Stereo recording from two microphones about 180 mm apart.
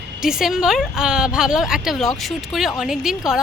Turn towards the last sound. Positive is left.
turn(degrees=-5)  # may be behind; listen again after turning